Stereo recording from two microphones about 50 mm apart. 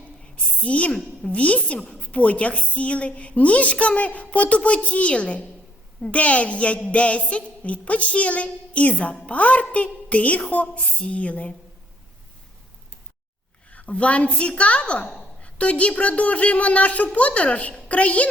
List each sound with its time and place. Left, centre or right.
0.6 s a woman's voice: left
13.7 s a woman's voice: left